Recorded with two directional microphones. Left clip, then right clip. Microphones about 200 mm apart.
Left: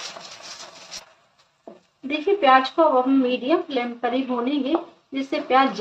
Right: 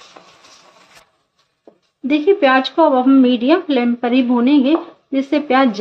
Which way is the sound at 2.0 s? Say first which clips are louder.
Right 6 dB; 50° right (ahead or behind).